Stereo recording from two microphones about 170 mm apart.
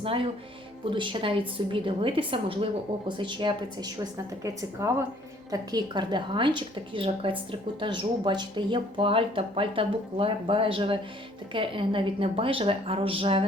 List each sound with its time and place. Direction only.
0.0 s a woman's voice: 35° right (ahead or behind)